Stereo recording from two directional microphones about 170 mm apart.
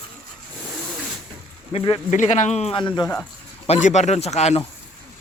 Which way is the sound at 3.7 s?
45° left (ahead or behind).